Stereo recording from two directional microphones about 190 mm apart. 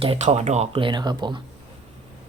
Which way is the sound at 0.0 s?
35° right (ahead or behind).